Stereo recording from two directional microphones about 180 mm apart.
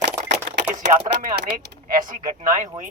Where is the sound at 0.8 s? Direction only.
45° right (ahead or behind).